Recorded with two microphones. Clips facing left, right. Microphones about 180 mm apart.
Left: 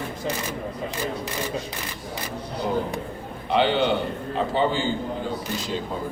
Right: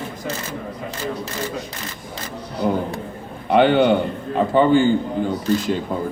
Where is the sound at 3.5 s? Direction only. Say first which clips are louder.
Right 6 dB; 55° right (ahead or behind).